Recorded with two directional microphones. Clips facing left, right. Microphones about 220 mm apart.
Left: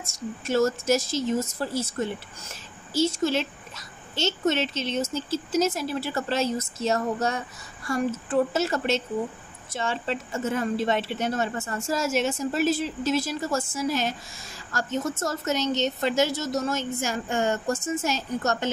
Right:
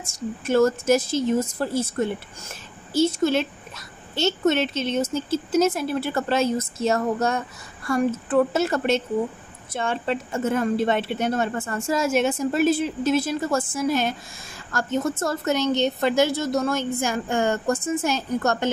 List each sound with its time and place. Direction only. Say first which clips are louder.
0.5 s a child's voice: right 4 dB; 55° right (ahead or behind)